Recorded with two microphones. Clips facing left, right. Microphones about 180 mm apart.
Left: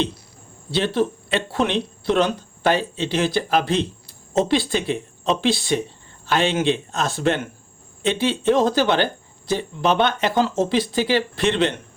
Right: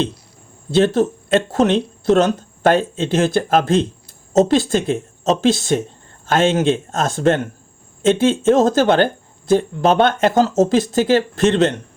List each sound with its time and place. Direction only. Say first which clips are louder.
0.7 s speech: right 6 dB; 45° right (ahead or behind)